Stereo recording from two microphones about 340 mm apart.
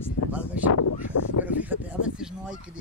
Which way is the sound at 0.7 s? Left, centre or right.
Left.